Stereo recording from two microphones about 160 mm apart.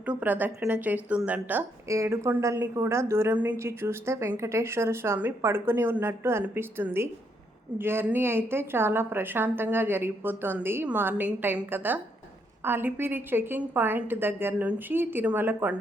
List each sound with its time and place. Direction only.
0.0 s a woman's voice: 10° right (ahead or behind)